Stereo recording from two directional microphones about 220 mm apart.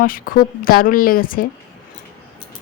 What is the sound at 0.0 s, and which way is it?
A woman's voice, 40° left (ahead or behind).